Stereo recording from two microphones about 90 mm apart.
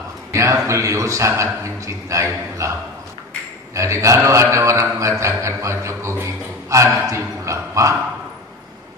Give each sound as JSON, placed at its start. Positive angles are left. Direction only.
{"t": 0.3, "sound": "a sound", "side_deg": -35}
{"t": 0.7, "sound": "a man's voice", "side_deg": -35}
{"t": 3.7, "sound": "a man's voice", "side_deg": -35}